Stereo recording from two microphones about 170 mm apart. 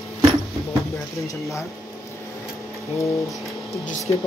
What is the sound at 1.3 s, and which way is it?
Speech, 20° left (ahead or behind).